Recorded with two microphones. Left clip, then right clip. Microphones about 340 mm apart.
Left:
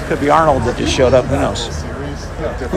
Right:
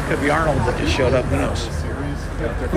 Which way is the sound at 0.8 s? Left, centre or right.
Centre.